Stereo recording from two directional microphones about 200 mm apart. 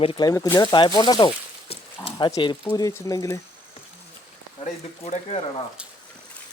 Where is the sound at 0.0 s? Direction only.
25° left (ahead or behind).